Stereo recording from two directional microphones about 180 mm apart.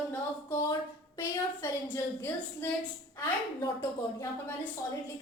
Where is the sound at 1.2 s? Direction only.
15° left (ahead or behind).